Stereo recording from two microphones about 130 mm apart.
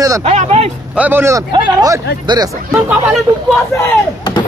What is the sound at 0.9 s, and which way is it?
Speech, 15° right (ahead or behind).